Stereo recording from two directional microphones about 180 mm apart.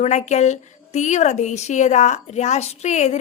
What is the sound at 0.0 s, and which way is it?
Speech, 40° left (ahead or behind).